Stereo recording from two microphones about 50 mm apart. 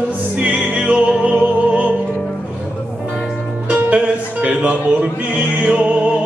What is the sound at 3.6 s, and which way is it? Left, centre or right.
Music, right.